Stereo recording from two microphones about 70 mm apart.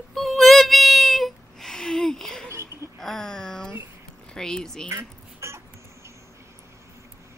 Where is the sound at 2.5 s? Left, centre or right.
Right.